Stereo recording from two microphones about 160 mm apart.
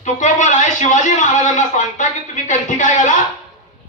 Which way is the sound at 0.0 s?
50° left (ahead or behind).